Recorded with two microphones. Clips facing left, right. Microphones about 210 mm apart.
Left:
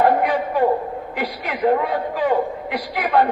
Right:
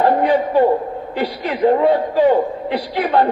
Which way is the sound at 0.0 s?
30° right (ahead or behind).